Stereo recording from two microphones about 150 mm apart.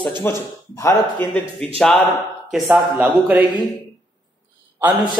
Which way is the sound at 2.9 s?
15° right (ahead or behind).